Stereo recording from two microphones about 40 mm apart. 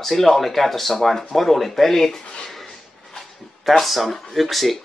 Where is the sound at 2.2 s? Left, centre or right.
Left.